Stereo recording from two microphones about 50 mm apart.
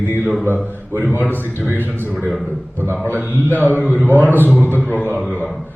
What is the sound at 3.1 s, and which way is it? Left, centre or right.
A man's voice, right.